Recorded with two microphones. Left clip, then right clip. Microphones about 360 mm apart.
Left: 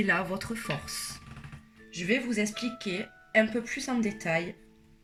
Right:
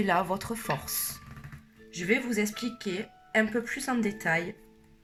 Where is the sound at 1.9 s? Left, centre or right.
Centre.